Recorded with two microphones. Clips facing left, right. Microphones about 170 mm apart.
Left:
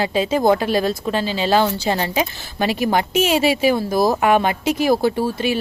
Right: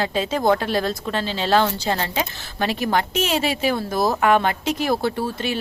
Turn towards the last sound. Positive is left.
turn(degrees=10)  # may be behind; listen again after turning